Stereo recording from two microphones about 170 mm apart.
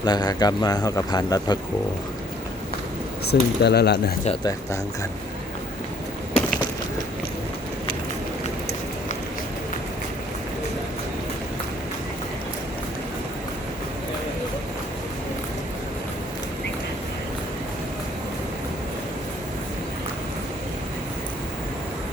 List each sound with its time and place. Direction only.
0.0 s a man's voice: 25° left (ahead or behind)
3.2 s speech: 75° left (ahead or behind)